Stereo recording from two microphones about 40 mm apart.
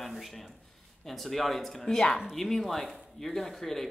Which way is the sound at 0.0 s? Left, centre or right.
Centre.